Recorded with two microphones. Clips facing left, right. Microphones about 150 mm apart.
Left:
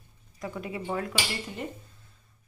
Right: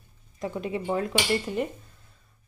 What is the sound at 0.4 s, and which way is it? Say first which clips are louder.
Speech: right 5 dB; 25° right (ahead or behind).